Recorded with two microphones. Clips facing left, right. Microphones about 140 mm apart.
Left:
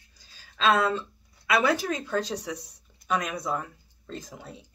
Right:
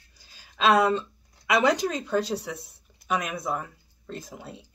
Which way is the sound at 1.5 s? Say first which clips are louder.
Right 2 dB; 15° right (ahead or behind).